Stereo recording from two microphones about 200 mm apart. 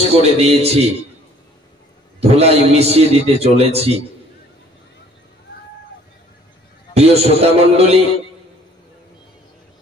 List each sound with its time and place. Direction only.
0.1 s a man's voice: 30° right (ahead or behind)
2.1 s a man's voice: 30° right (ahead or behind)
6.9 s a man's voice: 30° right (ahead or behind)